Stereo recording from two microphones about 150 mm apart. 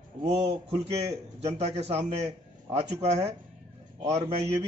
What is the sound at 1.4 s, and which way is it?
Speech, 45° right (ahead or behind).